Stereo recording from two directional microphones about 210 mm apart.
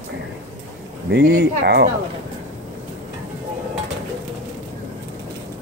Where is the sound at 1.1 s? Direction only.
50° right (ahead or behind).